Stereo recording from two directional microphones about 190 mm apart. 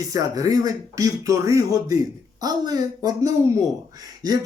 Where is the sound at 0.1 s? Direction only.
20° right (ahead or behind).